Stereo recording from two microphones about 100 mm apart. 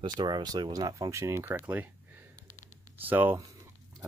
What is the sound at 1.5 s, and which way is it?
Speech, 15° right (ahead or behind).